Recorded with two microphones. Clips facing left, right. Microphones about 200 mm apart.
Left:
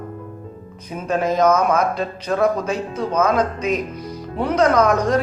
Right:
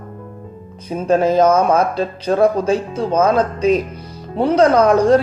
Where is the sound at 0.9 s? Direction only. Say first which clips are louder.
Right 6 dB; 30° right (ahead or behind).